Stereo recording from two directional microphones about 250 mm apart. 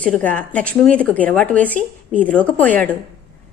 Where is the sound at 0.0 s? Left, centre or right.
Centre.